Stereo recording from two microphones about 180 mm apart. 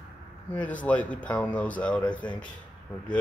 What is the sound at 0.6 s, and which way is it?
Speech, 10° left (ahead or behind).